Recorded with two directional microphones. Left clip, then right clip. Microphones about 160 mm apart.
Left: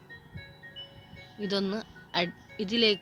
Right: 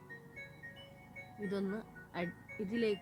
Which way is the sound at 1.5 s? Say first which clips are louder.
Left 9 dB; 15° left (ahead or behind).